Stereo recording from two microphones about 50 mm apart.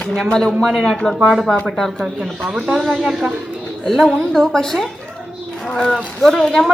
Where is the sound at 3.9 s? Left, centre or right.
Centre.